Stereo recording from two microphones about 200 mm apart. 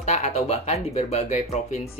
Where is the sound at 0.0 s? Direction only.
35° left (ahead or behind).